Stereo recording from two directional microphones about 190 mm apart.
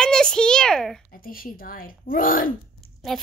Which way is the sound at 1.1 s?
50° left (ahead or behind).